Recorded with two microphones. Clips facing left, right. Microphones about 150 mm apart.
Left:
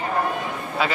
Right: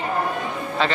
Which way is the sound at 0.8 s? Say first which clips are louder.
Right 1 dB; 10° left (ahead or behind).